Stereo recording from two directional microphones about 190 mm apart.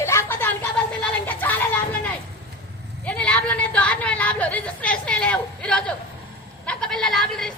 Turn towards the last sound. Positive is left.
turn(degrees=0)  # may be behind; listen again after turning